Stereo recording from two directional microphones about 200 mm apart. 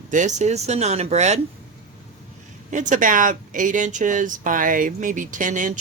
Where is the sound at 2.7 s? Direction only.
40° right (ahead or behind).